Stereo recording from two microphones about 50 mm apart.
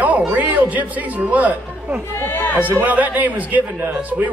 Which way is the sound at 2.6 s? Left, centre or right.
Right.